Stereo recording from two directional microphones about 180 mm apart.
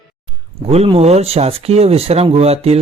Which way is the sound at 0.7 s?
35° right (ahead or behind).